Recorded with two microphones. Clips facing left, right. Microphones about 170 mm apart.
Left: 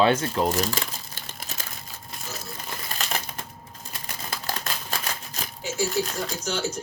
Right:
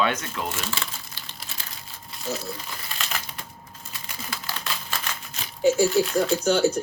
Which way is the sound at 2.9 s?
45° left (ahead or behind).